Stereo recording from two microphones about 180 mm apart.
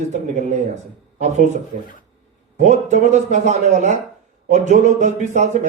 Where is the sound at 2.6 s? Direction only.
40° right (ahead or behind).